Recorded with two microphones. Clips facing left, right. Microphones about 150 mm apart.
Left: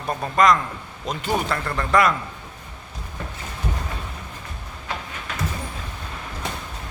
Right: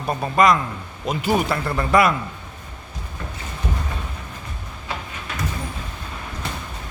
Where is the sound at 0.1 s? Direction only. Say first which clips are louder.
Right 1 dB; 5° right (ahead or behind).